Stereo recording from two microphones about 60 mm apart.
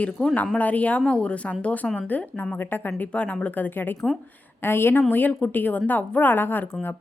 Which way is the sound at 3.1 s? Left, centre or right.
Centre.